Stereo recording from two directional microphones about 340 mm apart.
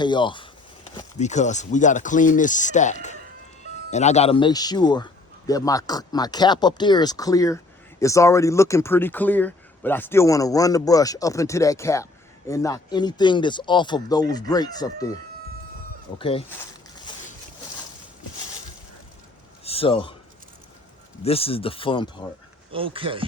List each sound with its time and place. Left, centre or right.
0.0 s speech: centre
16.1 s speech: centre
19.6 s a man's voice: centre
21.2 s speech: centre
22.7 s speech: centre